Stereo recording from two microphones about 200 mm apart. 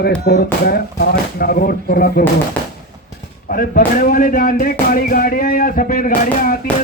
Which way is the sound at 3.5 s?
45° left (ahead or behind).